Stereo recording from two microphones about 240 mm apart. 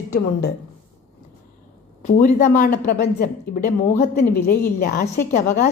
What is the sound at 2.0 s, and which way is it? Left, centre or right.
A woman's voice, left.